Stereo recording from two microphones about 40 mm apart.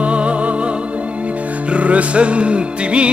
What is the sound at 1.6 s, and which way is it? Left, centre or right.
Music, right.